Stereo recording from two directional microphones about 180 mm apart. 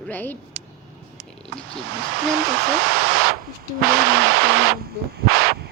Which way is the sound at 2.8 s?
60° right (ahead or behind).